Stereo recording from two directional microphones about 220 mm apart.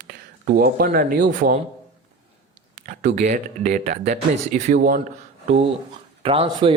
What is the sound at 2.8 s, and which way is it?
Speech, 35° right (ahead or behind).